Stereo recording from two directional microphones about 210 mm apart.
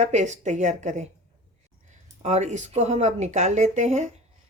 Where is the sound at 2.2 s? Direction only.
35° right (ahead or behind).